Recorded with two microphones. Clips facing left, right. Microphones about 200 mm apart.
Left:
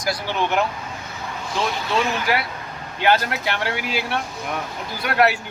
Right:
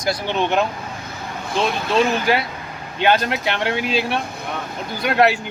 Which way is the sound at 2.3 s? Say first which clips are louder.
Right 3 dB; 25° right (ahead or behind).